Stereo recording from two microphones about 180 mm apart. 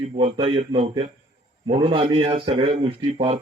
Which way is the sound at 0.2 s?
30° right (ahead or behind).